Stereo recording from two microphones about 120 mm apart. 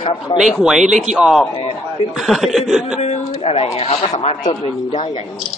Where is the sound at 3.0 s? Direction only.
55° left (ahead or behind).